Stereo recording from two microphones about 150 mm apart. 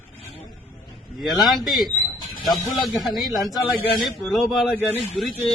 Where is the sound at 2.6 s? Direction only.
25° left (ahead or behind).